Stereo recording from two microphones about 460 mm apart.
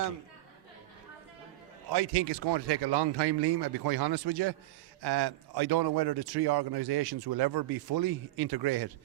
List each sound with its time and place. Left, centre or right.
1.9 s a man's voice: right